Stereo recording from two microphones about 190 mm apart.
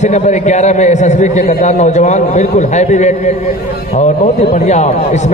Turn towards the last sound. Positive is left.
turn(degrees=35)  # may be behind; listen again after turning